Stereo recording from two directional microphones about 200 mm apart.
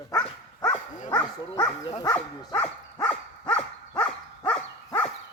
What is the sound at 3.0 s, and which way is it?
Dog, 5° left (ahead or behind).